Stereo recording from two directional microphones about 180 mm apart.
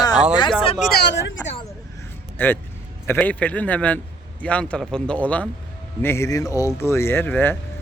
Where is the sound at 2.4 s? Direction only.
10° left (ahead or behind).